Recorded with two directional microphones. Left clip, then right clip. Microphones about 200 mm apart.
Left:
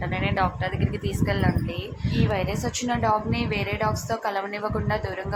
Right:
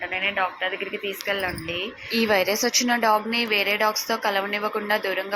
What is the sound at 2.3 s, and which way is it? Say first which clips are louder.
Speech: right 9 dB; 20° right (ahead or behind).